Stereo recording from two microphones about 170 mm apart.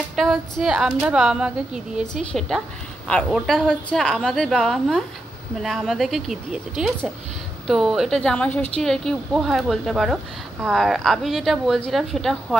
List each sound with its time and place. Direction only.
0.1 s a woman's voice: centre (ahead or behind)